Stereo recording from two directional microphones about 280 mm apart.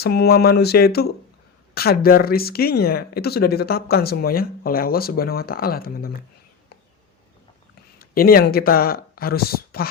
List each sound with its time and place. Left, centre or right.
0.0 s speech: left
7.9 s speech: left